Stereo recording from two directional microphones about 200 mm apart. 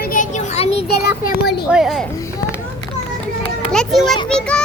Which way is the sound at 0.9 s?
55° left (ahead or behind).